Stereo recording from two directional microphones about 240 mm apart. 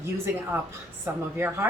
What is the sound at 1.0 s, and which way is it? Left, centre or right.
Speech, centre.